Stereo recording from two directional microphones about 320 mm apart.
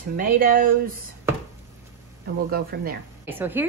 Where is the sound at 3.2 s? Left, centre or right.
Centre.